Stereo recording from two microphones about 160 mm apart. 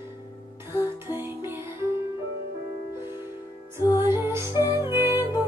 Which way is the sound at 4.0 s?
15° right (ahead or behind).